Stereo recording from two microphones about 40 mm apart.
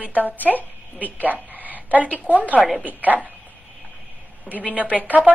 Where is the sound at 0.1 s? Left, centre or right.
Left.